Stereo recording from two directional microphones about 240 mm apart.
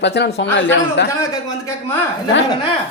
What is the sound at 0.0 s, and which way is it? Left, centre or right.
Speech, left.